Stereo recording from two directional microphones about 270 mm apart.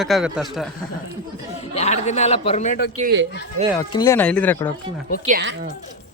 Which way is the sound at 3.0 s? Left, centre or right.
Right.